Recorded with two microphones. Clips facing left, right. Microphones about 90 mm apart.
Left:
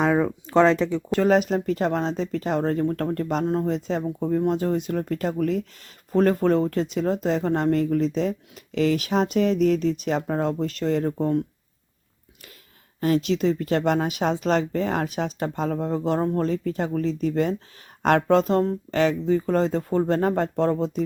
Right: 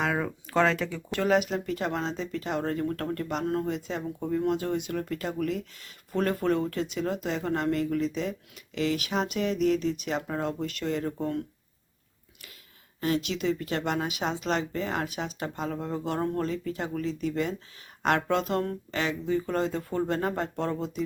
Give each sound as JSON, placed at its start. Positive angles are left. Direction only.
{"t": 0.1, "sound": "speech", "side_deg": 20}
{"t": 1.2, "sound": "speech", "side_deg": 40}
{"t": 3.4, "sound": "speech", "side_deg": 25}
{"t": 3.7, "sound": "speech", "side_deg": 40}
{"t": 13.0, "sound": "speech", "side_deg": 40}